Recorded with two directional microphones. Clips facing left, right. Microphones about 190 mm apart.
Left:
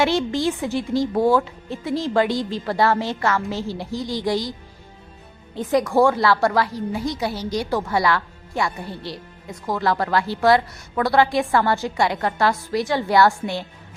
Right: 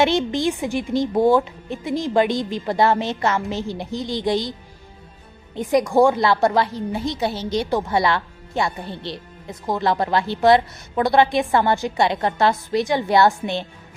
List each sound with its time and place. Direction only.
0.0 s a woman's voice: 20° right (ahead or behind)
5.5 s a woman's voice: 15° right (ahead or behind)